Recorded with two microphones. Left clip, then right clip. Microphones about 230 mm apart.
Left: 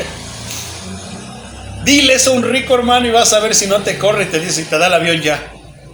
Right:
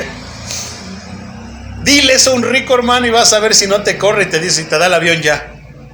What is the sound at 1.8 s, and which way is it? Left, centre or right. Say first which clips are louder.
A man's voice: right 1 dB; right.